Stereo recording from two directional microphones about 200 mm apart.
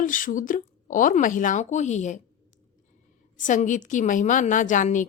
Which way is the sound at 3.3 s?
40° left (ahead or behind).